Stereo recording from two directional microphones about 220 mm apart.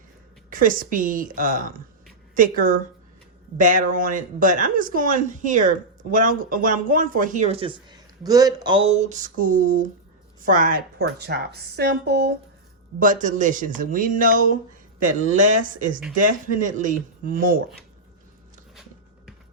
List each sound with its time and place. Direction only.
0.5 s speech: 40° right (ahead or behind)
13.0 s speech: 35° right (ahead or behind)
18.7 s a sound: centre (ahead or behind)